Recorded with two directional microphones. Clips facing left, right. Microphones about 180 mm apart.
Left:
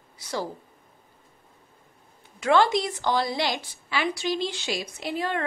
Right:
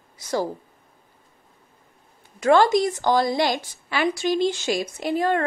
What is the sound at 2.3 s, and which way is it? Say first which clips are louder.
A woman's voice: right 4 dB; 45° right (ahead or behind).